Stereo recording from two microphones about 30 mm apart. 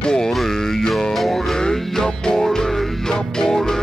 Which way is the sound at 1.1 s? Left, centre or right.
Centre.